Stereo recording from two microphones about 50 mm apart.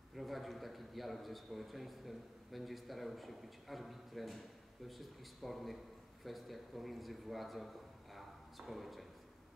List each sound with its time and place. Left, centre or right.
0.1 s a man's voice: centre